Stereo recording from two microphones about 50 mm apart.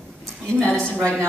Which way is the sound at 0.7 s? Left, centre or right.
Centre.